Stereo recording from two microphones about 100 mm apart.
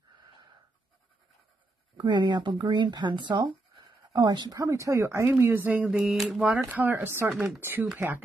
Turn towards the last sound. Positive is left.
turn(degrees=-20)  # may be behind; listen again after turning